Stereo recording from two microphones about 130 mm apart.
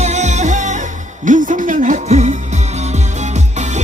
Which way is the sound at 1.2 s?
85° right.